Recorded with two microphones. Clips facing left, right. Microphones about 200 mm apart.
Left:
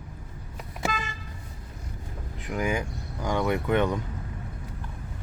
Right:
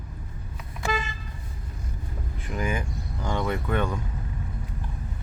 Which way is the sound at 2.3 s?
15° left (ahead or behind).